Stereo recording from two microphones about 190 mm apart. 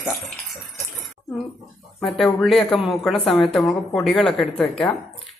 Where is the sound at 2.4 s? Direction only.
Centre (ahead or behind).